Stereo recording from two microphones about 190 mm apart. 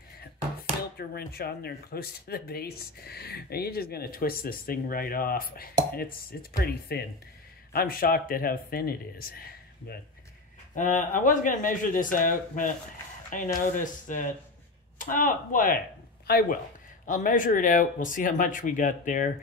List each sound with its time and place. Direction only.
0.9 s speech: 55° left (ahead or behind)